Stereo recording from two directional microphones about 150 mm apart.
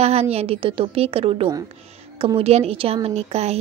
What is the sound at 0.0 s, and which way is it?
A woman's voice, 45° right (ahead or behind).